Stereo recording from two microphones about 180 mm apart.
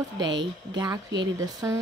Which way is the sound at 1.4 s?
15° right (ahead or behind).